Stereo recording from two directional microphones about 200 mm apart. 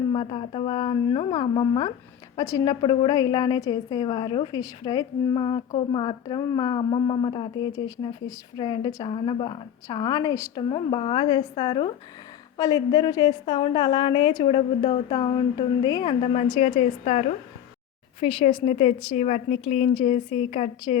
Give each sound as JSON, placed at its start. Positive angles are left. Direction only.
{"t": 0.1, "sound": "a woman's voice", "side_deg": 25}